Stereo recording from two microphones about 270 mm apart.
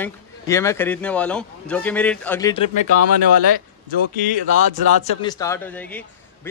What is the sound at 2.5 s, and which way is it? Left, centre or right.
Speech, left.